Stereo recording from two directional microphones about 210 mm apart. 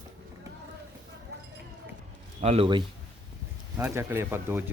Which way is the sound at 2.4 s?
30° right (ahead or behind).